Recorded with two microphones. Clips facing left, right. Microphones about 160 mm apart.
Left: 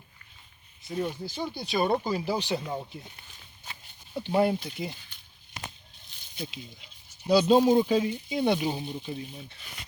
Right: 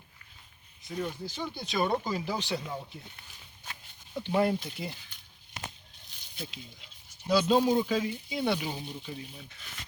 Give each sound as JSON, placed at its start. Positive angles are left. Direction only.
{"t": 0.9, "sound": "speech", "side_deg": 10}
{"t": 4.1, "sound": "speech", "side_deg": 15}
{"t": 7.3, "sound": "speech", "side_deg": 5}
{"t": 7.7, "sound": "speech", "side_deg": 25}